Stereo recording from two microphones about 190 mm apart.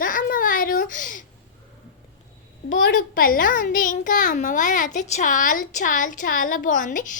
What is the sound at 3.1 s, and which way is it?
A woman's voice, 45° left (ahead or behind).